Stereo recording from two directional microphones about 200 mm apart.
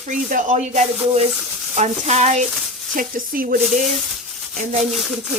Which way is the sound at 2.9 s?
45° right (ahead or behind).